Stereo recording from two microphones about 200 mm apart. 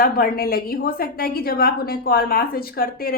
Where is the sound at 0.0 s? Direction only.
50° left (ahead or behind).